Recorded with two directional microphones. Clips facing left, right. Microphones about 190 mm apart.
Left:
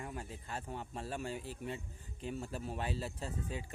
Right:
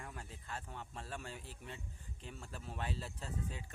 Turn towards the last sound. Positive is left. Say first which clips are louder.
# left 4 dB
turn(degrees=5)  # may be behind; listen again after turning